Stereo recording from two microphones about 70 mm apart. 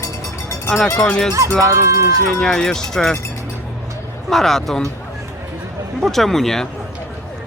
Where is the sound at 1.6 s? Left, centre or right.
Right.